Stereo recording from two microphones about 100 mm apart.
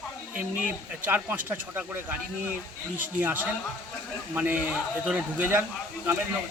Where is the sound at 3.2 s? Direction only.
20° right (ahead or behind).